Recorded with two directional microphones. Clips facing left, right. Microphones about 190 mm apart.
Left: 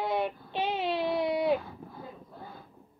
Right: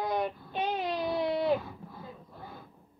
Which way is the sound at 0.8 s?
25° left (ahead or behind).